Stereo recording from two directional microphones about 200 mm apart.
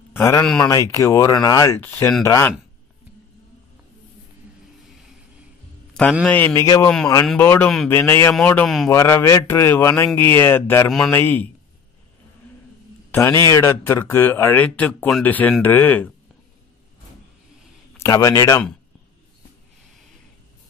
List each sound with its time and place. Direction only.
0.1 s speech: 15° left (ahead or behind)
6.2 s speech: 10° left (ahead or behind)
8.9 s speech: 15° left (ahead or behind)
13.1 s speech: 15° left (ahead or behind)
17.9 s a man's voice: 15° left (ahead or behind)